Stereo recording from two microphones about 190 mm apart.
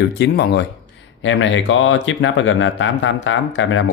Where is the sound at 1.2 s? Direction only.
85° left.